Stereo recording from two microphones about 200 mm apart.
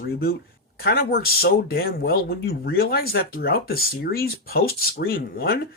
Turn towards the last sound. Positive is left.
turn(degrees=50)  # may be behind; listen again after turning